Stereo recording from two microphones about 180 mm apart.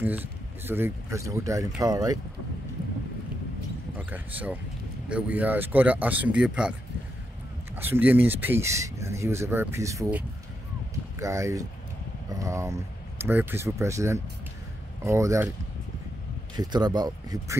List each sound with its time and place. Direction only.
0.0 s speech: 10° right (ahead or behind)
4.1 s speech: 10° right (ahead or behind)
7.7 s speech: 10° right (ahead or behind)
16.5 s speech: 25° right (ahead or behind)